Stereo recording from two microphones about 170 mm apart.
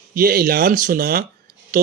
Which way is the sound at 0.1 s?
60° right (ahead or behind).